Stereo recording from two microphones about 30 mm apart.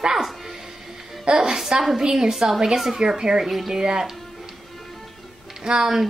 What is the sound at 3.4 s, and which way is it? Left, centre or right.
Speech, centre.